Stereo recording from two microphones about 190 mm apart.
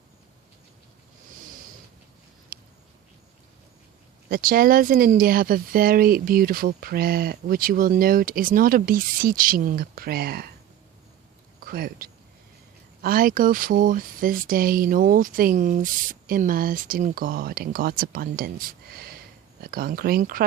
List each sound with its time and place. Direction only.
2.5 s a sound: 50° right (ahead or behind)
4.3 s speech: 50° right (ahead or behind)
11.6 s speech: 50° right (ahead or behind)